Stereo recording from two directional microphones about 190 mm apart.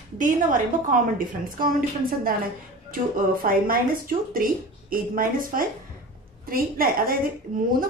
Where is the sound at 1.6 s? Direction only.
50° right (ahead or behind).